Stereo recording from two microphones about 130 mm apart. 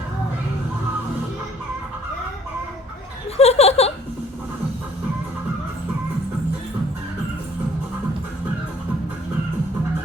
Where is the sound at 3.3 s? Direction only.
55° left (ahead or behind).